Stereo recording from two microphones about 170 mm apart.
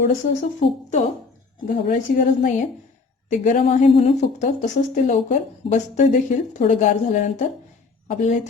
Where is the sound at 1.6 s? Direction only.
50° left (ahead or behind).